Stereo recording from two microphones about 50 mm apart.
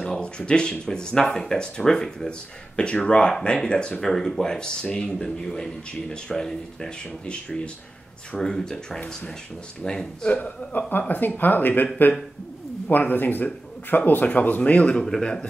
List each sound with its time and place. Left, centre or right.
0.2 s speech: left
4.0 s speech: centre
10.3 s speech: left
12.9 s speech: left
15.0 s speech: centre